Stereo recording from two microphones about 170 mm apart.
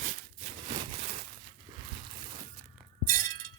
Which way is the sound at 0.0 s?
50° right (ahead or behind).